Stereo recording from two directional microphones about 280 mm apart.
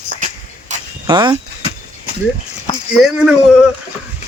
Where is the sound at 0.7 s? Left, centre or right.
Right.